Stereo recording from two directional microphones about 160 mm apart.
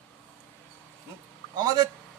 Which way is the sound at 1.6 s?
25° right (ahead or behind).